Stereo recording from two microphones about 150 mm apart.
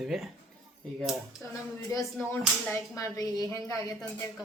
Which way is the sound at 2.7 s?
20° left (ahead or behind).